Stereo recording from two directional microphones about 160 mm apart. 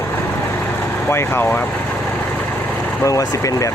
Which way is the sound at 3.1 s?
20° left (ahead or behind).